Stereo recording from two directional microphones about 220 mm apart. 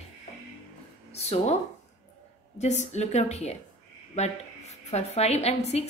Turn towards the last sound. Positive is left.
turn(degrees=30)  # may be behind; listen again after turning